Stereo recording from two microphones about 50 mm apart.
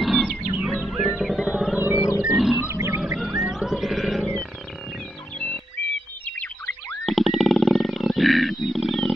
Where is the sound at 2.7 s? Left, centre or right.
Right.